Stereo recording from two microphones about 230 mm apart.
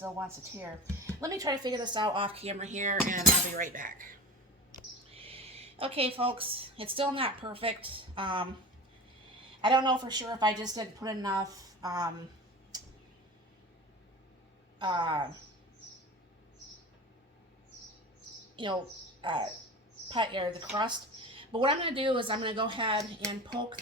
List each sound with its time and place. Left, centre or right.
0.0 s a woman's voice: centre; by 4.2 s right
5.1 s speech: right
9.6 s a woman's voice: centre
14.8 s speech: centre
18.5 s speech: right